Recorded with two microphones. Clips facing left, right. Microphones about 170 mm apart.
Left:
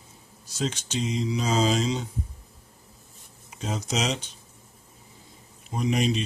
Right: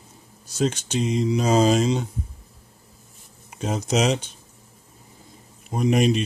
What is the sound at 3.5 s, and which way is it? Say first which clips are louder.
Speech: right 6 dB; 55° right (ahead or behind).